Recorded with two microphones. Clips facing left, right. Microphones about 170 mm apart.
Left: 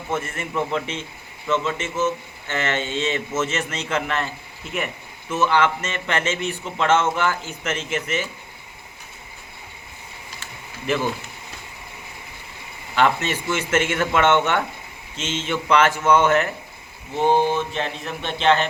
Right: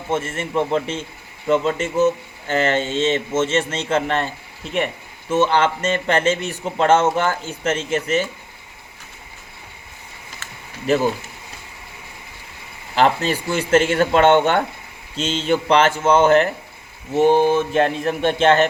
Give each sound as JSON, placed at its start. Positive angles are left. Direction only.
{"t": 0.1, "sound": "a man's voice", "side_deg": -25}
{"t": 5.3, "sound": "speech", "side_deg": -30}
{"t": 10.8, "sound": "speech", "side_deg": -40}
{"t": 13.0, "sound": "speech", "side_deg": -35}
{"t": 17.7, "sound": "speech", "side_deg": -50}